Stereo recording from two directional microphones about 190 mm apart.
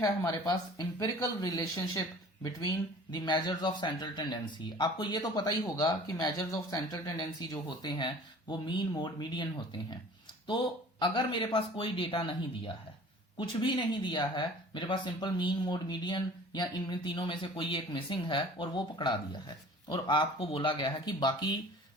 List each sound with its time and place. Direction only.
0.0 s speech: 20° left (ahead or behind)